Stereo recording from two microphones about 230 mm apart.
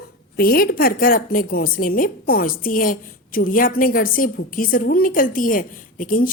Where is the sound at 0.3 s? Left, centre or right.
Left.